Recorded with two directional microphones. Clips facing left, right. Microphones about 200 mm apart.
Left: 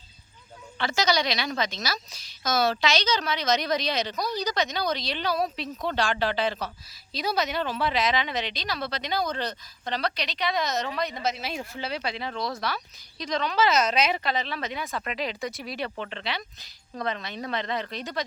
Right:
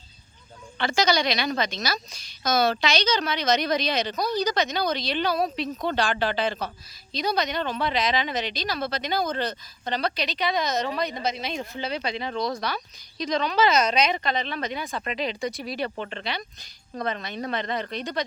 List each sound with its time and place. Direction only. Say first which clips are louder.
1.0 s speech: right 1 dB; centre (ahead or behind)
8.1 s speech: right 2 dB; 40° right (ahead or behind)
9.8 s speech: right 2 dB; centre (ahead or behind)
14.8 s speech: right 2 dB; 25° right (ahead or behind)
15.4 s speech: right 3 dB; centre (ahead or behind)
16.0 s speech: right 1 dB; 45° right (ahead or behind)